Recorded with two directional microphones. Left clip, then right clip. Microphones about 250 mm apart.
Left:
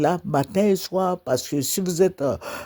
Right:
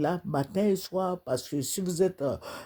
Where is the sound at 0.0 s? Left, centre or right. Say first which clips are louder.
Left 8 dB; left.